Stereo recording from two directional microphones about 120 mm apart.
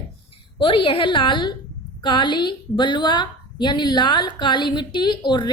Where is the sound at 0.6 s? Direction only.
45° left (ahead or behind).